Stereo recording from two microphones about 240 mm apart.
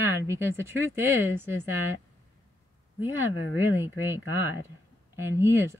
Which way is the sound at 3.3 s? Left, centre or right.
Left.